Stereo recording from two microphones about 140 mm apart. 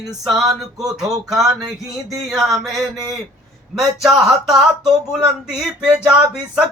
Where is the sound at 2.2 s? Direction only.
Centre (ahead or behind).